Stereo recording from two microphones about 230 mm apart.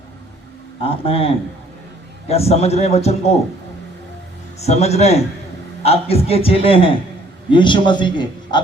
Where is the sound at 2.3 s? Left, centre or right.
Left.